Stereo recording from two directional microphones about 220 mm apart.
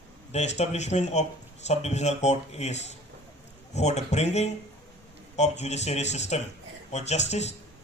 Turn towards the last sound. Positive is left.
turn(degrees=30)  # may be behind; listen again after turning